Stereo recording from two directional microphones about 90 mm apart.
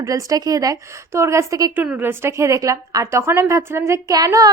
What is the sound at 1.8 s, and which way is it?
A woman's voice, 20° right (ahead or behind).